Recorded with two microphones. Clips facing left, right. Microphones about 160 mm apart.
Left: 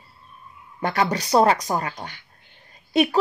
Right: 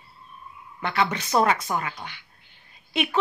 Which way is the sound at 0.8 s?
40° left (ahead or behind).